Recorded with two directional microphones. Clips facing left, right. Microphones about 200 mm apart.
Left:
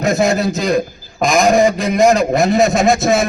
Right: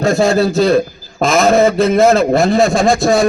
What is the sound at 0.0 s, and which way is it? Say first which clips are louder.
A man's voice: right 3 dB; 20° left (ahead or behind).